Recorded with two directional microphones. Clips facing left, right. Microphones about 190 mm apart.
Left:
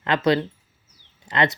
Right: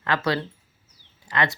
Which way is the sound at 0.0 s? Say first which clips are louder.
Left 5 dB; 20° left (ahead or behind).